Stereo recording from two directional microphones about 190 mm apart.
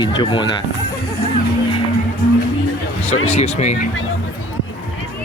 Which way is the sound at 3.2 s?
35° left (ahead or behind).